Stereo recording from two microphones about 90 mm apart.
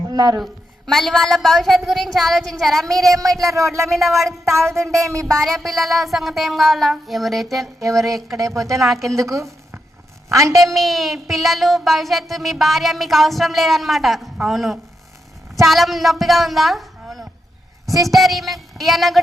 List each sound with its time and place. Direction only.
0.1 s speech: 50° right (ahead or behind)
0.9 s child singing: centre (ahead or behind)
3.0 s a woman's voice: 40° right (ahead or behind)
3.3 s child singing: centre (ahead or behind)
5.0 s a woman's voice: 35° right (ahead or behind)
5.3 s child singing: 5° left (ahead or behind)
9.0 s a woman's voice: 35° right (ahead or behind)
10.6 s child singing: centre (ahead or behind)
15.6 s speech: centre (ahead or behind)
18.1 s child singing: centre (ahead or behind)